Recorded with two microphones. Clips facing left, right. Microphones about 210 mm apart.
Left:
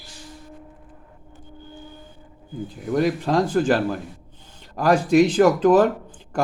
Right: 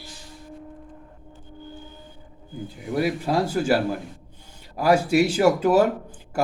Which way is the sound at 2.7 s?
5° right (ahead or behind).